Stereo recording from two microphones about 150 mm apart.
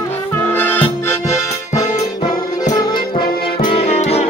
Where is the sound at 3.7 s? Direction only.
40° left (ahead or behind).